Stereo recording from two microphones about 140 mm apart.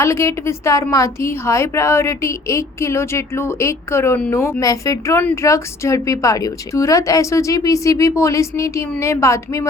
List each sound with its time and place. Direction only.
0.0 s a woman's voice: 20° left (ahead or behind)